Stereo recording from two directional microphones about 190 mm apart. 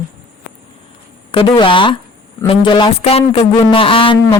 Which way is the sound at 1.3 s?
25° left (ahead or behind).